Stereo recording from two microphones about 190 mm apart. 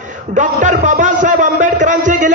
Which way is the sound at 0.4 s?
40° right (ahead or behind).